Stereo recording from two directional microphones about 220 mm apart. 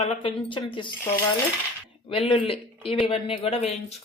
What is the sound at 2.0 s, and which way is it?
Speech, 25° left (ahead or behind).